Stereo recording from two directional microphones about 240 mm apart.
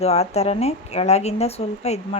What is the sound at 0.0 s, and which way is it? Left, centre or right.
A woman's voice, left.